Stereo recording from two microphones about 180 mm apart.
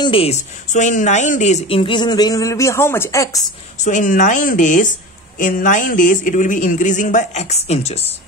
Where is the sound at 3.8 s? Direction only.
45° left (ahead or behind).